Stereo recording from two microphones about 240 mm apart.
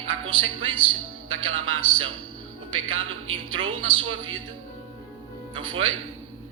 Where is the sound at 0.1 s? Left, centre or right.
Right.